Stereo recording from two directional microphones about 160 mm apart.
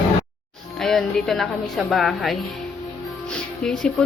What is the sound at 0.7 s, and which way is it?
Speech, 5° left (ahead or behind).